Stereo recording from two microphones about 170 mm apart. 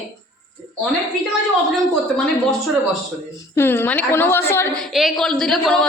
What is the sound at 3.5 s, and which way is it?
A woman's voice, 15° left (ahead or behind).